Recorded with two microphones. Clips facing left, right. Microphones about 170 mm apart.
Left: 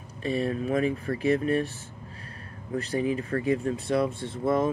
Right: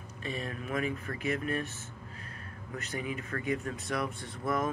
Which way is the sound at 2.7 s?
30° left (ahead or behind).